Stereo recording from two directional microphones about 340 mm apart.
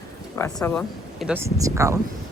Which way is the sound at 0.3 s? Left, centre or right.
Centre.